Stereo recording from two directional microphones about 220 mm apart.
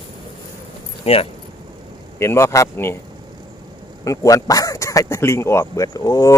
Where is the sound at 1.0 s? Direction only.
25° left (ahead or behind).